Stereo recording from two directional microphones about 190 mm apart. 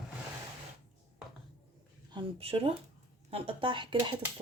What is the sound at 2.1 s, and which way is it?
Speech, 25° right (ahead or behind).